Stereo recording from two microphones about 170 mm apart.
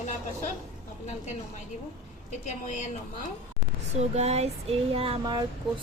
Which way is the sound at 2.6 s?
45° left (ahead or behind).